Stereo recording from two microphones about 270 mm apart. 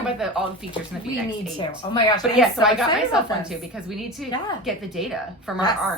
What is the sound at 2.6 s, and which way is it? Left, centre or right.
A woman's voice, centre.